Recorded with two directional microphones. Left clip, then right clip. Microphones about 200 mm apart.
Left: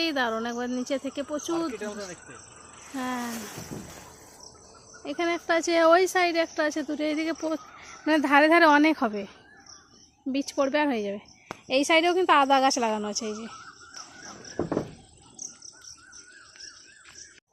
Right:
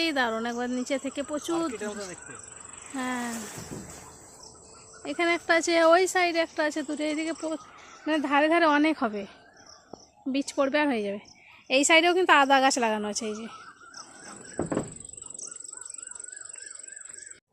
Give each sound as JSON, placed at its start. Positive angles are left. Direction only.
{"t": 0.0, "sound": "a woman's voice", "side_deg": 0}
{"t": 1.7, "sound": "speech", "side_deg": 25}
{"t": 2.9, "sound": "a woman's voice", "side_deg": 0}
{"t": 3.4, "sound": "a sound", "side_deg": 35}
{"t": 5.0, "sound": "speech", "side_deg": 0}
{"t": 7.3, "sound": "speech", "side_deg": 20}
{"t": 10.3, "sound": "a woman's voice", "side_deg": 0}